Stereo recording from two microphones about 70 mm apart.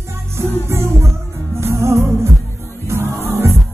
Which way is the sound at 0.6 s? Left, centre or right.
Right.